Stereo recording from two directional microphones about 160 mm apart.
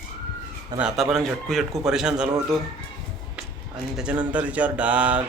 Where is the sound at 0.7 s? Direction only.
5° right (ahead or behind).